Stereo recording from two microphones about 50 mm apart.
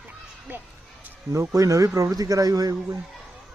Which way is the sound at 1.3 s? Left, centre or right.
Right.